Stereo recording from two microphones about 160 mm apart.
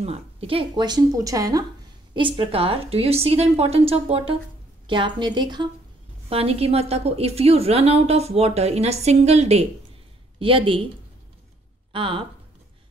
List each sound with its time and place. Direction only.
0.0 s a woman's voice: 40° right (ahead or behind)
11.9 s speech: 35° right (ahead or behind)